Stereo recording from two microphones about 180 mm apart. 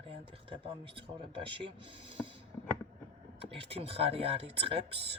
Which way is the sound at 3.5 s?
30° right (ahead or behind).